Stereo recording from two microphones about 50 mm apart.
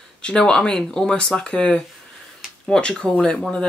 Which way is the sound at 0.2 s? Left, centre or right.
Centre.